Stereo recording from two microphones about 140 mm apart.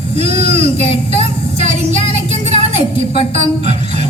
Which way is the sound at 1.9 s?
50° right (ahead or behind).